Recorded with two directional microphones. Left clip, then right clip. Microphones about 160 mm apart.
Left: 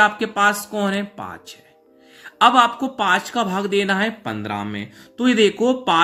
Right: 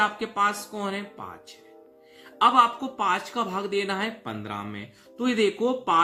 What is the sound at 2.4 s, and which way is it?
Speech, 45° left (ahead or behind).